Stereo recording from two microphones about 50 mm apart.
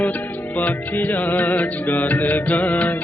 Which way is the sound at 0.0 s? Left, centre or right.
Left.